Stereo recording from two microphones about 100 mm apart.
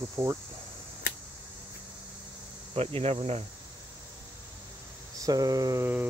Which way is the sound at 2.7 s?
75° right (ahead or behind).